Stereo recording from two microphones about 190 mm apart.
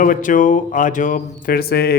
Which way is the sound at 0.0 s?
45° left (ahead or behind).